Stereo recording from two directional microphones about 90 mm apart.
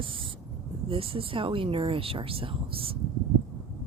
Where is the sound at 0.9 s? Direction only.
90° right.